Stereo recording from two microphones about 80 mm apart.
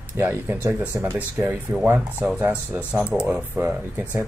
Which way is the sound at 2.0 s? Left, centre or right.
Centre.